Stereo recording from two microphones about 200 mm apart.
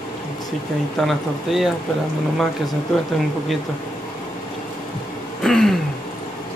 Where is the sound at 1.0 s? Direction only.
Centre (ahead or behind).